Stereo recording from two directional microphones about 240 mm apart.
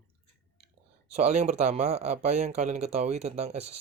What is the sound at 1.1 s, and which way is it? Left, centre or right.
Speech, right.